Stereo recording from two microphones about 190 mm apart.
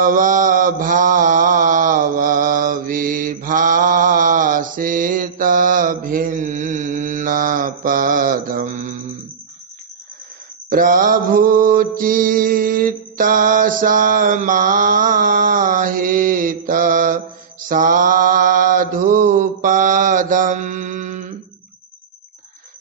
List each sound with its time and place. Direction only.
0.0 s mantra: 45° right (ahead or behind)
10.7 s mantra: 45° right (ahead or behind)